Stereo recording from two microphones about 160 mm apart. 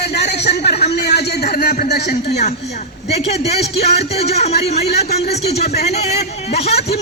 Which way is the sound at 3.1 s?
40° left (ahead or behind).